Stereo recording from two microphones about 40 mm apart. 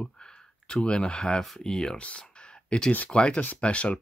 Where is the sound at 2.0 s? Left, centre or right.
Left.